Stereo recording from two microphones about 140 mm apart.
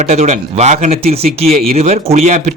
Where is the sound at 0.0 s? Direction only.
50° right (ahead or behind).